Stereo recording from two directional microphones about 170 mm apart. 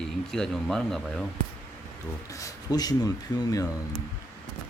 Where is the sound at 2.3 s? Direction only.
20° left (ahead or behind).